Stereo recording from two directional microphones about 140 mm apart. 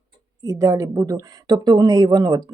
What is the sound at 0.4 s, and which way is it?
A woman's voice, 25° right (ahead or behind).